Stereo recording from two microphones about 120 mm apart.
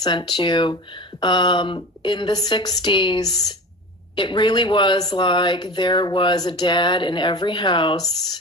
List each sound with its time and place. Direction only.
0.0 s speech: 35° left (ahead or behind)